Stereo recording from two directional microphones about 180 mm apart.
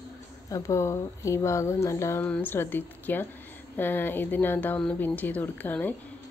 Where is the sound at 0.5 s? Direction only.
15° left (ahead or behind).